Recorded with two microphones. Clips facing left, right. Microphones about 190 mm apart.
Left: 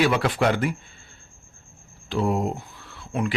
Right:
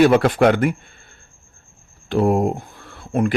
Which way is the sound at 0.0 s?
50° right (ahead or behind).